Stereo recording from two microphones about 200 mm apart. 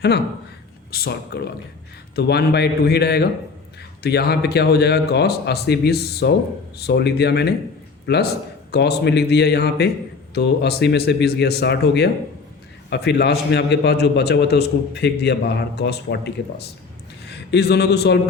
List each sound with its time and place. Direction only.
0.9 s a man's voice: 50° left (ahead or behind)